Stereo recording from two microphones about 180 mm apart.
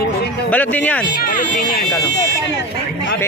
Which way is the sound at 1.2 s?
55° left (ahead or behind).